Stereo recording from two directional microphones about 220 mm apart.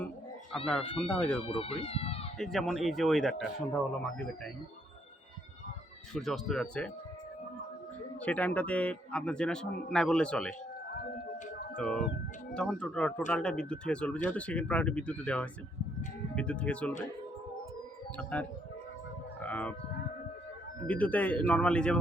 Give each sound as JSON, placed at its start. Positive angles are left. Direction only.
{"t": 0.7, "sound": "a man's voice", "side_deg": 5}
{"t": 1.5, "sound": "speech", "side_deg": 25}
{"t": 2.4, "sound": "a man's voice", "side_deg": 0}
{"t": 6.1, "sound": "a man's voice", "side_deg": 0}
{"t": 8.2, "sound": "a man's voice", "side_deg": 5}
{"t": 11.8, "sound": "a man's voice", "side_deg": 5}
{"t": 18.2, "sound": "a man's voice", "side_deg": 5}
{"t": 19.4, "sound": "a sound", "side_deg": 5}
{"t": 20.8, "sound": "speech", "side_deg": 5}